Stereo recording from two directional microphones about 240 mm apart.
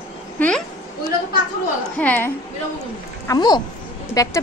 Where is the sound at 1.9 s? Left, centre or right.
Centre.